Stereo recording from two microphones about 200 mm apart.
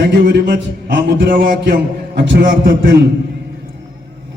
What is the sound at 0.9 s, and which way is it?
A man's voice, 60° right (ahead or behind).